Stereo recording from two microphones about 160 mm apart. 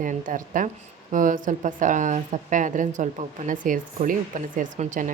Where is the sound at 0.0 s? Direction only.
55° right (ahead or behind).